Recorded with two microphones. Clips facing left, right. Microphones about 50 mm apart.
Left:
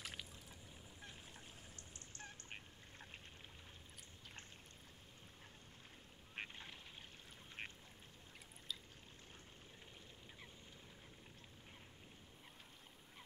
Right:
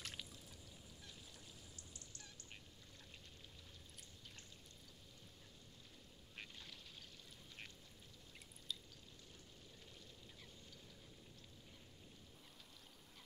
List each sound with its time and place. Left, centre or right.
0.0 s a sound: centre
2.1 s fowl: left
6.3 s duck: left